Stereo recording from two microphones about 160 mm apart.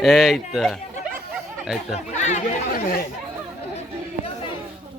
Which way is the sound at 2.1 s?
45° left (ahead or behind).